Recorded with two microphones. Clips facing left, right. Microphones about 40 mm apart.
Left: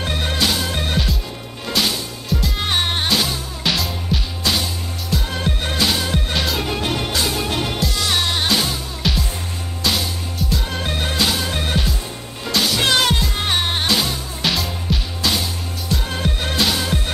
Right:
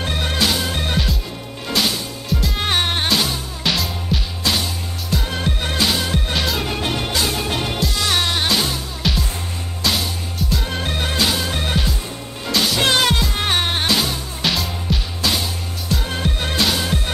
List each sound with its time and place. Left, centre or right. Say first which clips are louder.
0.0 s music: even; centre